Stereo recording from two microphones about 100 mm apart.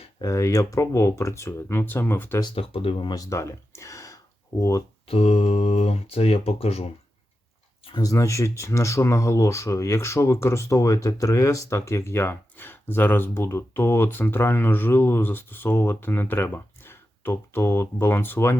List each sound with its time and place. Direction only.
0.2 s speech: 30° left (ahead or behind)
2.6 s speech: 70° left (ahead or behind)
3.1 s a sound: 35° left (ahead or behind)
5.0 s speech: 85° left
7.9 s speech: 35° left (ahead or behind)